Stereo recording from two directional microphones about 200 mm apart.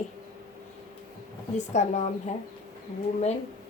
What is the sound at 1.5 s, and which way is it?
Speech, 35° left (ahead or behind).